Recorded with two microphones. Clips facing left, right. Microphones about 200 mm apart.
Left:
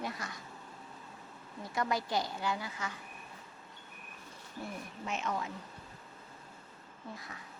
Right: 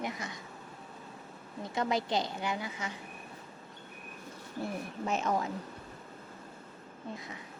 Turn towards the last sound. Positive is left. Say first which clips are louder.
# right 4 dB
turn(degrees=-20)  # may be behind; listen again after turning